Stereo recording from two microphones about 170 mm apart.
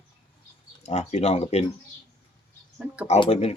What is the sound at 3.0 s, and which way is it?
Speech, 40° left (ahead or behind).